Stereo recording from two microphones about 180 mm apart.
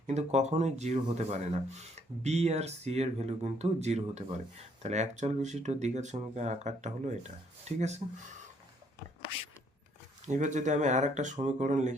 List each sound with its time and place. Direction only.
0.1 s speech: 40° right (ahead or behind)
10.2 s speech: 40° right (ahead or behind)